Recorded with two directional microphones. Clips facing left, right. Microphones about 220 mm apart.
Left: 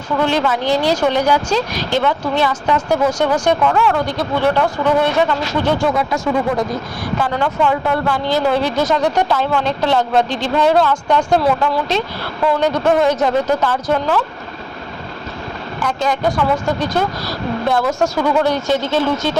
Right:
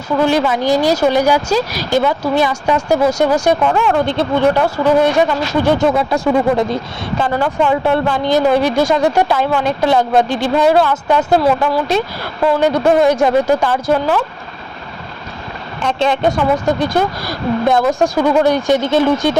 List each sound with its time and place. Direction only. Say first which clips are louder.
0.2 s speech: right 3 dB; 10° right (ahead or behind)
4.5 s speech: right 3 dB; 15° right (ahead or behind)
6.0 s speech: right 3 dB; 30° right (ahead or behind)
7.3 s speech: right 3 dB; 15° right (ahead or behind)
15.8 s speech: right 3 dB; 30° right (ahead or behind)
16.8 s speech: right 3 dB; 10° right (ahead or behind)